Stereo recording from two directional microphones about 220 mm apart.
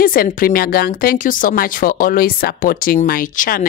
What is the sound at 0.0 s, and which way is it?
Speech, 40° left (ahead or behind).